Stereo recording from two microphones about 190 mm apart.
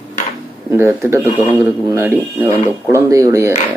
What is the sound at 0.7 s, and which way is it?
Speech, 15° right (ahead or behind).